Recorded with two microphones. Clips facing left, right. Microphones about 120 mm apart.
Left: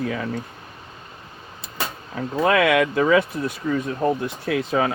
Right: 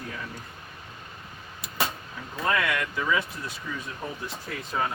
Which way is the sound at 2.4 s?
70° left (ahead or behind).